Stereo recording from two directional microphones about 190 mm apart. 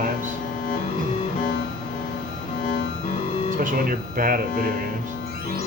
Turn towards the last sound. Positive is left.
turn(degrees=-50)  # may be behind; listen again after turning